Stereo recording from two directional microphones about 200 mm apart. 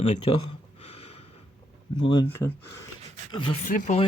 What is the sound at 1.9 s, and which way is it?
Speech, 25° left (ahead or behind).